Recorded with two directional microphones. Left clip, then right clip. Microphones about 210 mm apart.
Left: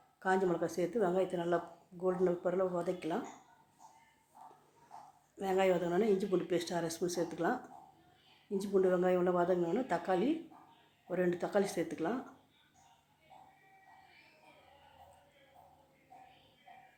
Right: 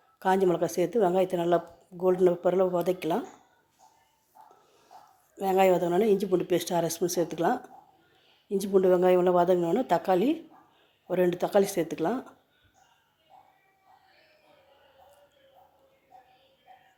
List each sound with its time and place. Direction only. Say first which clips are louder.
0.2 s a woman's voice: right 8 dB; 35° right (ahead or behind)
5.4 s a woman's voice: right 9 dB; 30° right (ahead or behind)